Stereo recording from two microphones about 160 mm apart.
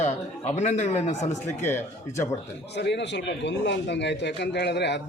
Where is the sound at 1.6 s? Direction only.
15° left (ahead or behind).